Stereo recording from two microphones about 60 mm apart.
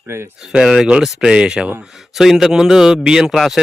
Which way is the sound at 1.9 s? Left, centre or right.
Centre.